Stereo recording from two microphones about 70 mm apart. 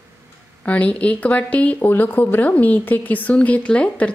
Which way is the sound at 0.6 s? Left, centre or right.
Centre.